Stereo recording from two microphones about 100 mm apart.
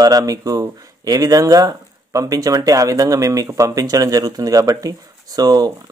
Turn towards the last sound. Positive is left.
turn(degrees=-40)  # may be behind; listen again after turning